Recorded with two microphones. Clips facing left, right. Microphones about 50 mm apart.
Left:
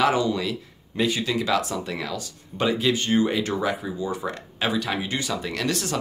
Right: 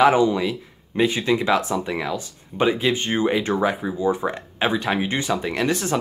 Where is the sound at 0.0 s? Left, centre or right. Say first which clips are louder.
Right 5 dB; right.